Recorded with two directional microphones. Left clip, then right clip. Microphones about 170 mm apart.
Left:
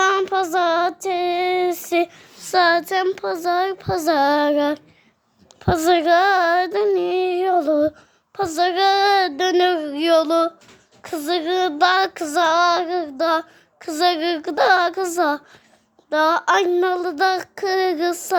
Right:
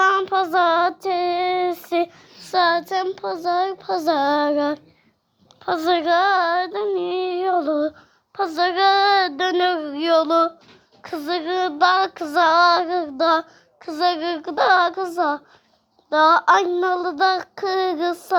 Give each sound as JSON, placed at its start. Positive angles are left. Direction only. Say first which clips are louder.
{"t": 0.0, "sound": "child singing", "louder": "even", "side_deg": 20}
{"t": 13.7, "sound": "child singing", "louder": "left 2 dB", "side_deg": 25}
{"t": 16.0, "sound": "child singing", "louder": "right 3 dB", "side_deg": 10}